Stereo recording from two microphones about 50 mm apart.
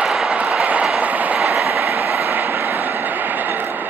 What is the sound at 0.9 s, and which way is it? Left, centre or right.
Train, right.